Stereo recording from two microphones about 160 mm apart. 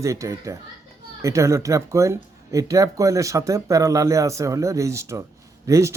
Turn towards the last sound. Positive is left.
turn(degrees=-20)  # may be behind; listen again after turning